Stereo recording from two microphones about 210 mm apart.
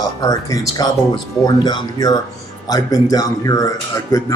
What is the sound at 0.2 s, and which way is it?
Speech, 15° left (ahead or behind).